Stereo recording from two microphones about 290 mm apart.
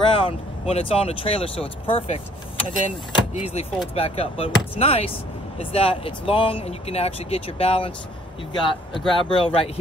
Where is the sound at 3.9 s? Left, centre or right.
Centre.